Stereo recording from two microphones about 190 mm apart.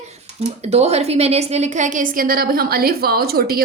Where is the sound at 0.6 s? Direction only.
35° right (ahead or behind).